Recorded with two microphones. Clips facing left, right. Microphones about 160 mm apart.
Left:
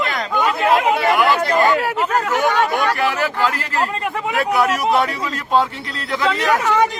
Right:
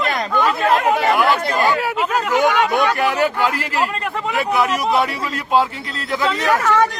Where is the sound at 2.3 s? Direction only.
15° right (ahead or behind).